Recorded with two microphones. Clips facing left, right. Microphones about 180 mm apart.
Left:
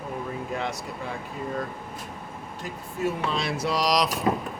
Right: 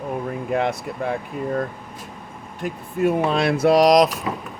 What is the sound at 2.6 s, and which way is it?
Speech, 55° right (ahead or behind).